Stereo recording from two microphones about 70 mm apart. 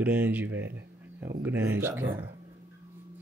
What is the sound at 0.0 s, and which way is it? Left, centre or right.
Speech, right.